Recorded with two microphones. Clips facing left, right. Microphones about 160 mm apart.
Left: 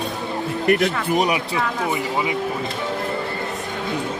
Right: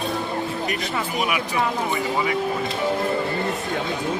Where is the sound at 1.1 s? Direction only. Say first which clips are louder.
Left 4 dB; 35° left (ahead or behind).